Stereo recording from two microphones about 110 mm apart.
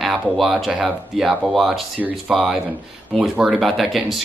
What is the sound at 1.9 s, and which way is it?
Speech, 15° right (ahead or behind).